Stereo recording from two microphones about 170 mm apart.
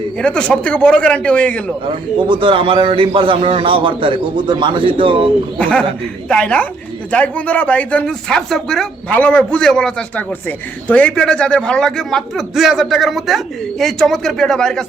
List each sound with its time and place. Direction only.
0.2 s speech: 5° left (ahead or behind)
2.3 s a man's voice: 30° right (ahead or behind)
5.5 s a man's voice: 5° left (ahead or behind)